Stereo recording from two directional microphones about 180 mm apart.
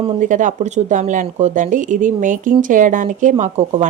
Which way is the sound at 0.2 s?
45° right (ahead or behind).